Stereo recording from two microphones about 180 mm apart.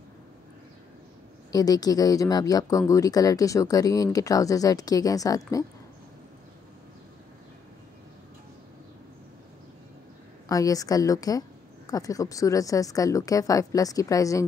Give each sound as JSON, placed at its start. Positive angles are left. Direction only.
{"t": 1.5, "sound": "speech", "side_deg": 20}
{"t": 10.5, "sound": "speech", "side_deg": 20}